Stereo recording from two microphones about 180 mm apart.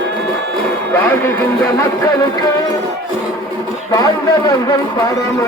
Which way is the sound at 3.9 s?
20° left (ahead or behind).